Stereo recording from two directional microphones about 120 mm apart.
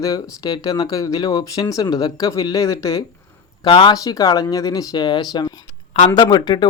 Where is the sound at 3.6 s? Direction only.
45° left (ahead or behind).